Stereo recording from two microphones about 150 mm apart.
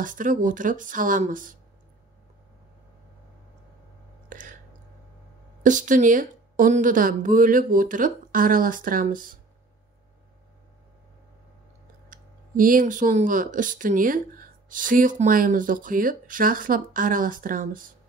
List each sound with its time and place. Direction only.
0.0 s speech: 60° right (ahead or behind)
4.3 s a sound: 60° right (ahead or behind)
5.6 s speech: 60° right (ahead or behind)
12.1 s speech: 65° right (ahead or behind)